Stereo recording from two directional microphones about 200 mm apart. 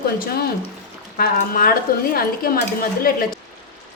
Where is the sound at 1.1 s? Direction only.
45° left (ahead or behind).